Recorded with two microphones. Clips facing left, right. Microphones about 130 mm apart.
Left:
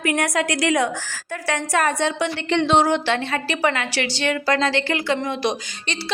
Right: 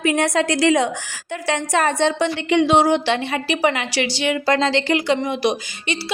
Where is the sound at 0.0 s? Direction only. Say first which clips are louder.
Right 3 dB; 25° right (ahead or behind).